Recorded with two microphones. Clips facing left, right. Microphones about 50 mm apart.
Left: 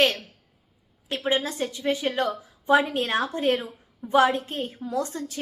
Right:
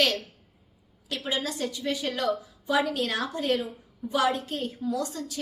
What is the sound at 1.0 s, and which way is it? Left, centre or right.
A woman's voice, left.